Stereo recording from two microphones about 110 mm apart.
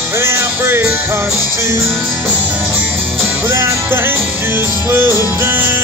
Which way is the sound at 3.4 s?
25° right (ahead or behind).